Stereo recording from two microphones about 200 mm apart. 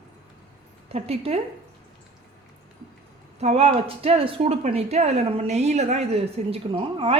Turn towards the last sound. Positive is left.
turn(degrees=-25)  # may be behind; listen again after turning